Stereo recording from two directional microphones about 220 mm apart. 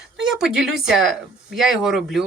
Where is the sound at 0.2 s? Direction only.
Centre (ahead or behind).